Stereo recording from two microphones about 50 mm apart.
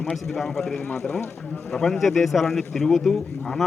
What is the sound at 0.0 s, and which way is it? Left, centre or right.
A man's voice, centre.